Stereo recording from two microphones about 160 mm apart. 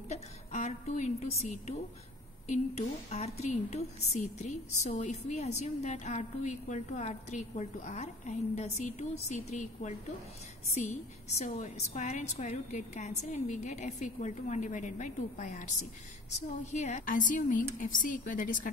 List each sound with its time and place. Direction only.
0.1 s a woman's voice: 45° left (ahead or behind)